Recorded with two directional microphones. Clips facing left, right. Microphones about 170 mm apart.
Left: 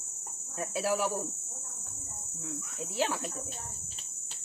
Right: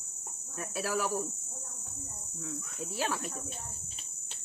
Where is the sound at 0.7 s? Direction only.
25° left (ahead or behind).